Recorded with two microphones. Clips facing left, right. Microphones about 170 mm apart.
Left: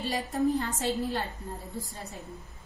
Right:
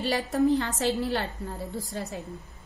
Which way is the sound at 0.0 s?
90° right.